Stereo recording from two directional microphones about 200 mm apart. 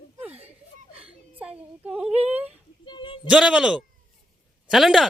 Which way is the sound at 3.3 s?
5° right (ahead or behind).